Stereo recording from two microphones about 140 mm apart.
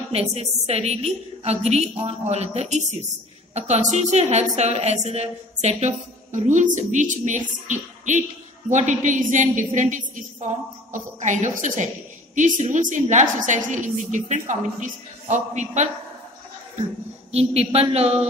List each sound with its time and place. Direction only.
0.1 s a woman's voice: 50° right (ahead or behind)
17.3 s a woman's voice: 45° right (ahead or behind)